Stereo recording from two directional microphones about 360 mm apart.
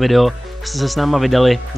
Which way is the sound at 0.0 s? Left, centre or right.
Centre.